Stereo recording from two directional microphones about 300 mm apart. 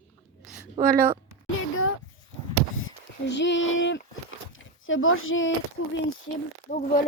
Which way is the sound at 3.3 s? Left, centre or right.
Left.